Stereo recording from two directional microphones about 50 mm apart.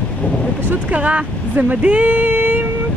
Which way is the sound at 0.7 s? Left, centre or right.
Right.